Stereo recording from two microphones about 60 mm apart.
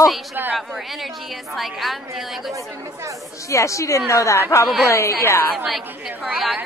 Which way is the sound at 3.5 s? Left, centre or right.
Left.